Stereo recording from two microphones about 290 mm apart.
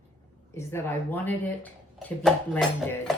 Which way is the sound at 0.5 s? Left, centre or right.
Centre.